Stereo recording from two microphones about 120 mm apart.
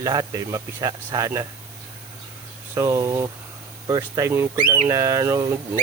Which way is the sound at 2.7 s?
25° right (ahead or behind).